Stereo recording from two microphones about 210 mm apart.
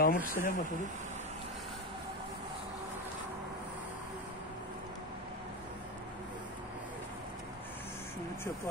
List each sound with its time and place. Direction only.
0.0 s speech: 40° left (ahead or behind)